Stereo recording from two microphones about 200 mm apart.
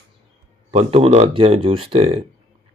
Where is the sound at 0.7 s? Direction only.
30° right (ahead or behind).